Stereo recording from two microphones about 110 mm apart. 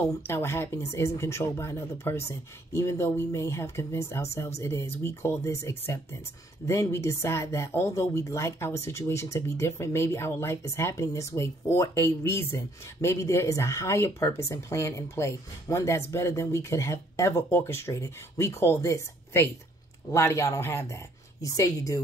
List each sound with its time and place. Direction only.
0.0 s a woman's voice: 25° left (ahead or behind)